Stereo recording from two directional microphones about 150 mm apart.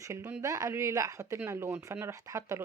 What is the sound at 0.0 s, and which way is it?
Speech, 20° right (ahead or behind).